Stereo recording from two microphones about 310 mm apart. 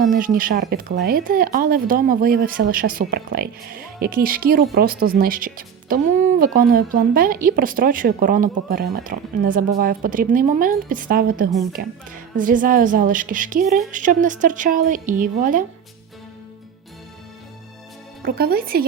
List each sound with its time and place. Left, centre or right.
0.1 s speech: right
18.2 s speech: right